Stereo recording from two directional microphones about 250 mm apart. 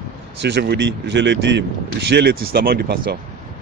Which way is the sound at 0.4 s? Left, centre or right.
Right.